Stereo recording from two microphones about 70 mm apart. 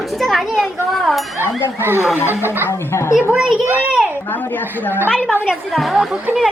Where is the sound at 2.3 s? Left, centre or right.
Right.